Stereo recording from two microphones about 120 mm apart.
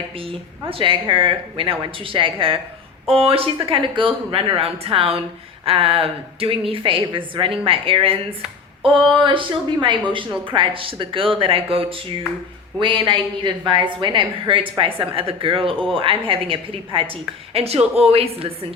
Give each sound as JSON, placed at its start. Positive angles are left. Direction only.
{"t": 0.2, "sound": "a woman's voice", "side_deg": -50}
{"t": 8.4, "sound": "a sound", "side_deg": 0}
{"t": 9.2, "sound": "a woman's voice", "side_deg": -45}